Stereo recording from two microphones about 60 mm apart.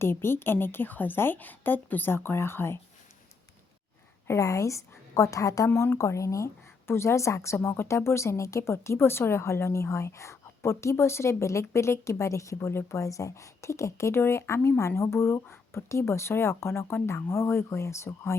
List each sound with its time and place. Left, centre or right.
0.0 s a woman's voice: left
4.4 s a woman's voice: left
6.0 s a woman's voice: left
6.8 s a woman's voice: left